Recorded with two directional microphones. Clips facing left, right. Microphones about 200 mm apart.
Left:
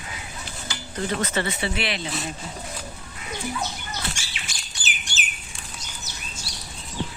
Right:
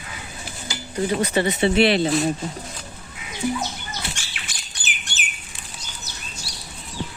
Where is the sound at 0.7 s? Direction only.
10° right (ahead or behind); by 2.1 s 30° right (ahead or behind).